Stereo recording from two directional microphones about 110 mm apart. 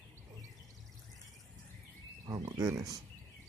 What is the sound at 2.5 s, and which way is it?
Speech, 30° right (ahead or behind).